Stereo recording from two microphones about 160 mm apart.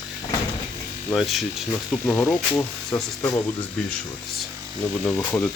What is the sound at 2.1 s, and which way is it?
Speech, 10° left (ahead or behind).